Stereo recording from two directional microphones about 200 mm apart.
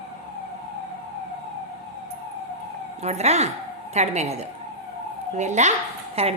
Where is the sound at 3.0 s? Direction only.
35° right (ahead or behind).